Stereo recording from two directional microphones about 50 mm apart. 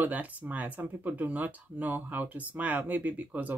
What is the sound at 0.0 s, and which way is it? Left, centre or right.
Speech, right.